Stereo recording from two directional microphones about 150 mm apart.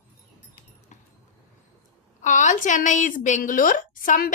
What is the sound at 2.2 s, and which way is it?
A woman's voice, 55° left (ahead or behind).